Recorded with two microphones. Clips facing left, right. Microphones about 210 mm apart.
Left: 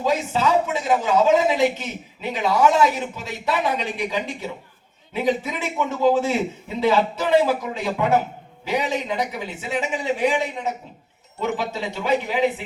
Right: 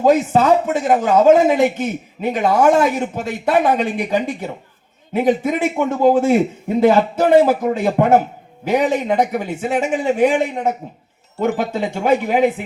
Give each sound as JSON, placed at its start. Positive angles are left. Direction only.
{"t": 0.0, "sound": "speech", "side_deg": -50}